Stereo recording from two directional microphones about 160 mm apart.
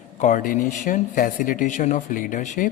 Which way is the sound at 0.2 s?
50° left (ahead or behind).